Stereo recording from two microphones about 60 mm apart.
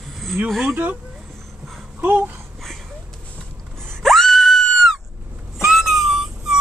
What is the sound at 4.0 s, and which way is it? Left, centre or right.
Screaming, centre.